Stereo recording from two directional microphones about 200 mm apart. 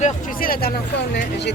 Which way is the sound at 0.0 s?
45° left (ahead or behind).